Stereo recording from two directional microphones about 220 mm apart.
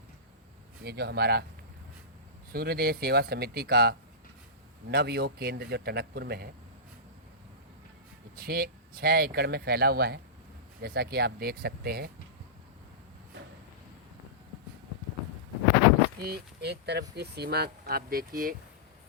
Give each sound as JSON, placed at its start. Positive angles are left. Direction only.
{"t": 0.9, "sound": "speech", "side_deg": -45}
{"t": 2.5, "sound": "speech", "side_deg": -45}
{"t": 8.4, "sound": "speech", "side_deg": -45}
{"t": 16.2, "sound": "speech", "side_deg": -45}